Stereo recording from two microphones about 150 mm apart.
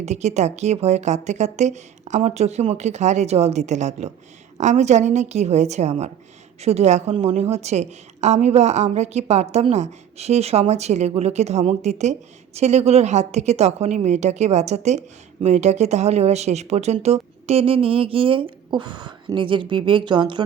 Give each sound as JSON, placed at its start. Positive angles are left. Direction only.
{"t": 0.0, "sound": "a woman's voice", "side_deg": -50}